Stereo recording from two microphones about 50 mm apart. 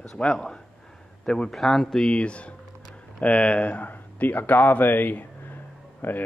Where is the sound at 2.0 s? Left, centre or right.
Left.